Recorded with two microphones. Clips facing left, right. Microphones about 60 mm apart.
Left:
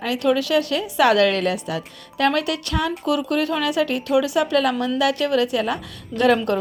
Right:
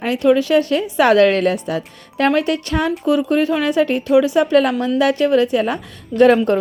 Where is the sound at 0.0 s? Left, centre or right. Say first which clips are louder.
Right 5 dB; right.